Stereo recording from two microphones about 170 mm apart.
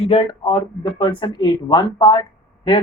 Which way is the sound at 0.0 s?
35° left (ahead or behind).